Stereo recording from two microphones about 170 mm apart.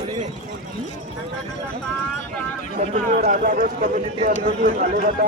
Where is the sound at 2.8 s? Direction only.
45° right (ahead or behind).